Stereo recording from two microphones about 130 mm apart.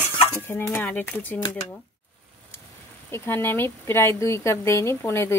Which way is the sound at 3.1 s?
20° left (ahead or behind).